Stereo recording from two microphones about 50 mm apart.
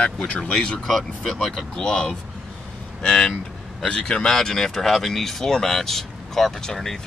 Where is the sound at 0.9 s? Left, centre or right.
Centre.